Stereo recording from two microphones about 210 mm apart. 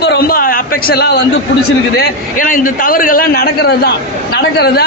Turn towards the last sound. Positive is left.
turn(degrees=50)  # may be behind; listen again after turning